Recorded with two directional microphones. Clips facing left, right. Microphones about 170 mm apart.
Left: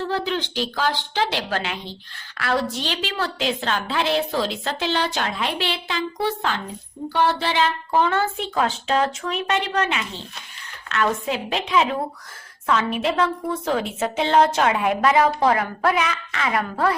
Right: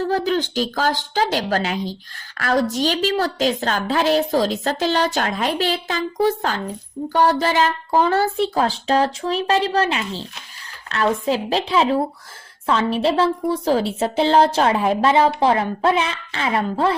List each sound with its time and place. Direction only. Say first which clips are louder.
0.0 s a woman's voice: right 5 dB; 40° right (ahead or behind); by 17.0 s 25° right (ahead or behind)